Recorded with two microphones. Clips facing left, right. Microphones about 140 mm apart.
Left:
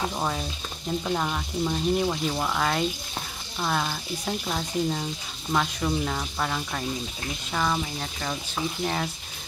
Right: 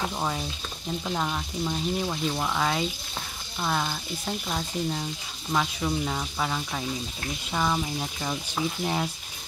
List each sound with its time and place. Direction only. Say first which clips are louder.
0.1 s speech: left 1 dB; centre (ahead or behind)